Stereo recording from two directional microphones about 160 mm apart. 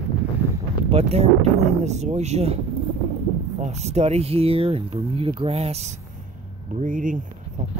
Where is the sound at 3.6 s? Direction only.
45° right (ahead or behind).